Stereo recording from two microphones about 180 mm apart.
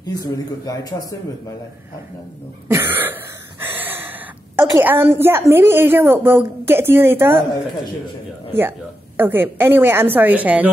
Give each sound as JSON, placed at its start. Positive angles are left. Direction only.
{"t": 0.0, "sound": "a man's voice", "side_deg": 20}
{"t": 2.7, "sound": "a woman's voice", "side_deg": -10}
{"t": 3.6, "sound": "gasp", "side_deg": -10}
{"t": 4.6, "sound": "a woman's voice", "side_deg": -10}
{"t": 8.5, "sound": "a woman's voice", "side_deg": -10}